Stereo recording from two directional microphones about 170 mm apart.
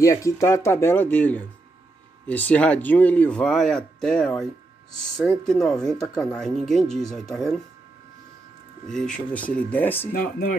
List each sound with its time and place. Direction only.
0.0 s speech: 20° left (ahead or behind); by 7.5 s centre (ahead or behind)
8.8 s speech: 5° left (ahead or behind)
10.1 s speech: 60° left (ahead or behind)